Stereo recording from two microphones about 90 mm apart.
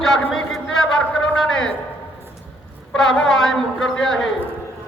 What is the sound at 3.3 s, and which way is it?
Speech, 5° left (ahead or behind).